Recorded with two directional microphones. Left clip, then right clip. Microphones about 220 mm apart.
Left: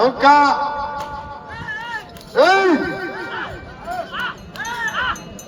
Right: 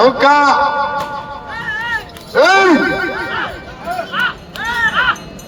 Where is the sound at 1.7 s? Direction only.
Centre (ahead or behind).